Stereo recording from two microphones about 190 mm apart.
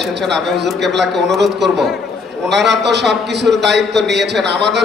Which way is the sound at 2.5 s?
65° right (ahead or behind).